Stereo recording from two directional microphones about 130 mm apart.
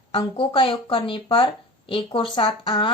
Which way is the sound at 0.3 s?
45° left (ahead or behind).